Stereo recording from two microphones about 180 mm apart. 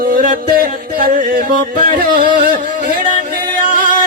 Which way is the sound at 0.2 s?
50° right (ahead or behind).